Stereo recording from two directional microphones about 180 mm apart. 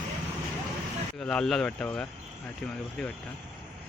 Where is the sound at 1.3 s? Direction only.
5° left (ahead or behind).